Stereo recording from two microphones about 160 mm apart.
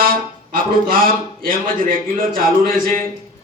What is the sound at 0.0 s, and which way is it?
Speech, 60° right (ahead or behind).